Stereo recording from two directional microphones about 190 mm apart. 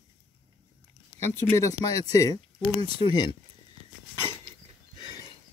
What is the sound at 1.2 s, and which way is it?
Speech, 10° left (ahead or behind).